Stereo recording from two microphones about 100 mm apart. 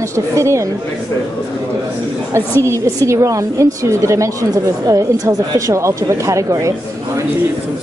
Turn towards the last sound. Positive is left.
turn(degrees=-30)  # may be behind; listen again after turning